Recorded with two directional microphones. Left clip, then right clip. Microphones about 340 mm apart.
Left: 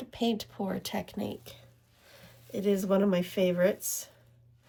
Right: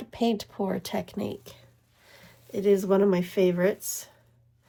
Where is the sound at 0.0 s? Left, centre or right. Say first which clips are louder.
Right 4 dB; centre.